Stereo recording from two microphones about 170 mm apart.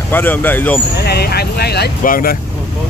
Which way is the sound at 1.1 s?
70° left (ahead or behind).